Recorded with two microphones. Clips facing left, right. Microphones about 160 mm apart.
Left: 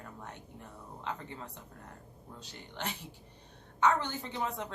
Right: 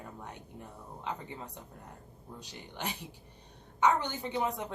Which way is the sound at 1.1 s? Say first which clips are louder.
Right 1 dB; 15° right (ahead or behind).